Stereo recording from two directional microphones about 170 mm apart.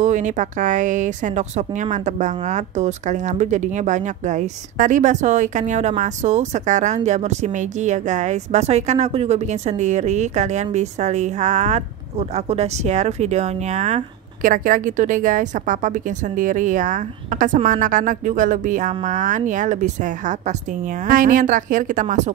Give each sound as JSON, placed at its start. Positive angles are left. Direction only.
{"t": 0.0, "sound": "speech", "side_deg": -45}